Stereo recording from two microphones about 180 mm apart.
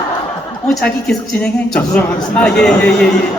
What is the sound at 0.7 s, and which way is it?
A woman's voice, centre (ahead or behind).